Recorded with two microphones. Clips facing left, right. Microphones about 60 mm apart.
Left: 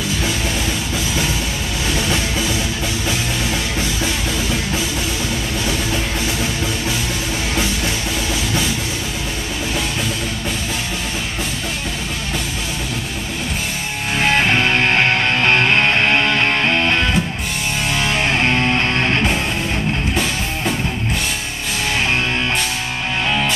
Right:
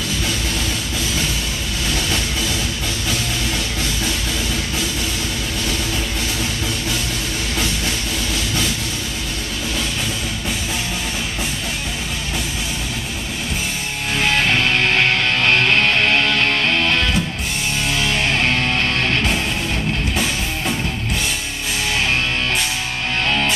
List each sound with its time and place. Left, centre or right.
14.1 s music: left